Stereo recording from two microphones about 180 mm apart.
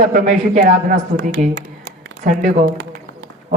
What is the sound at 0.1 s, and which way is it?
A man's voice, 45° right (ahead or behind).